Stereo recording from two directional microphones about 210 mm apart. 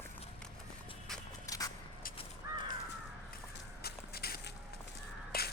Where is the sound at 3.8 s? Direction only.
50° left (ahead or behind).